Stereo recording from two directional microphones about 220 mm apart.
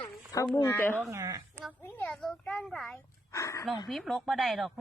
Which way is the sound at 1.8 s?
5° left (ahead or behind).